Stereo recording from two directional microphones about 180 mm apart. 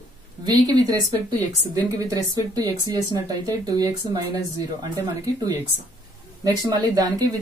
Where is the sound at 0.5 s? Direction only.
20° right (ahead or behind).